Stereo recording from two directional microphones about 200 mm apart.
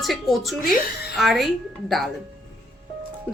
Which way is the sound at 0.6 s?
45° left (ahead or behind).